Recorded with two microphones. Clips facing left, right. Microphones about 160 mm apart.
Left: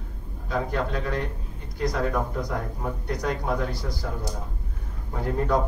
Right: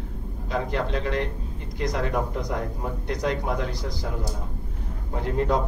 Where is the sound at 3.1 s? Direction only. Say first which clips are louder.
Right 1 dB; 20° right (ahead or behind).